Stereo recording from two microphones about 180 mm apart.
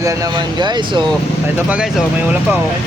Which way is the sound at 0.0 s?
20° right (ahead or behind).